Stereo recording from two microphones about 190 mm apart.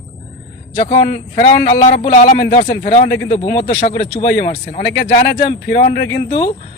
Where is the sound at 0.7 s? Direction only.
30° left (ahead or behind).